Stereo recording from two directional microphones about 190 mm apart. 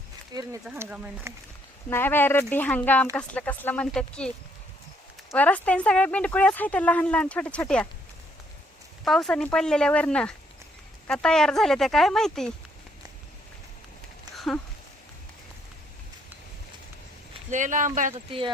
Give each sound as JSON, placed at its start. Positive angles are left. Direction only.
{"t": 0.3, "sound": "speech", "side_deg": -20}
{"t": 0.8, "sound": "speech", "side_deg": -10}
{"t": 1.9, "sound": "speech", "side_deg": 10}
{"t": 9.0, "sound": "speech", "side_deg": 0}
{"t": 14.3, "sound": "a sound", "side_deg": 0}
{"t": 17.5, "sound": "speech", "side_deg": -40}